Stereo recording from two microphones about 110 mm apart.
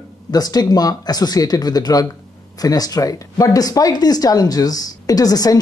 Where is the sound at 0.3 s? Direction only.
35° left (ahead or behind).